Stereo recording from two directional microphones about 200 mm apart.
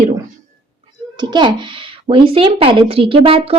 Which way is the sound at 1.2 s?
20° right (ahead or behind).